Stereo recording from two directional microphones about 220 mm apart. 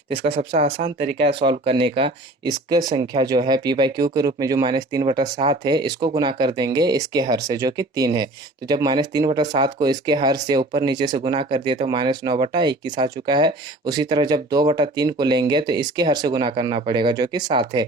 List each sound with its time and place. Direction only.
0.1 s speech: 25° right (ahead or behind)